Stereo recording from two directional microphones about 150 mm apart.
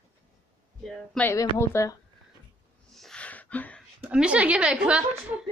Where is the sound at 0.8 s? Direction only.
5° left (ahead or behind).